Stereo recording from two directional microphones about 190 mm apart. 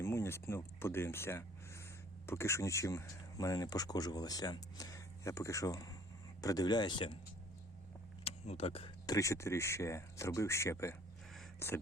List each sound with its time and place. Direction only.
0.0 s speech: 15° left (ahead or behind)
8.2 s vehicle: 35° left (ahead or behind)
9.0 s speech: 15° left (ahead or behind)